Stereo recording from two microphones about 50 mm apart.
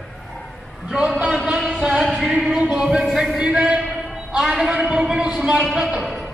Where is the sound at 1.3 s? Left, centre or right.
Centre.